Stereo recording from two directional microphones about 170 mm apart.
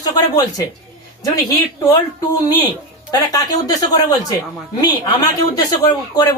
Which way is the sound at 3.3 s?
20° left (ahead or behind).